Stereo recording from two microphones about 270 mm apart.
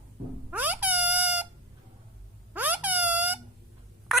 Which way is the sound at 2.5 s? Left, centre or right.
Centre.